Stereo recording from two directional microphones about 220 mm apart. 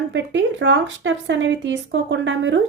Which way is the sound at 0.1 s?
55° right (ahead or behind).